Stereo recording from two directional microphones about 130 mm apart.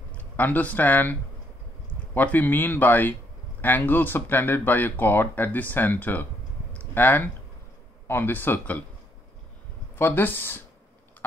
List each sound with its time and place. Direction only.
0.1 s speech: 10° left (ahead or behind)
2.1 s speech: 15° left (ahead or behind)
9.9 s speech: 15° left (ahead or behind)